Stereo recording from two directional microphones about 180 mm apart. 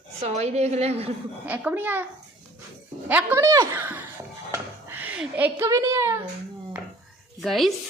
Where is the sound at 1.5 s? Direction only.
10° right (ahead or behind).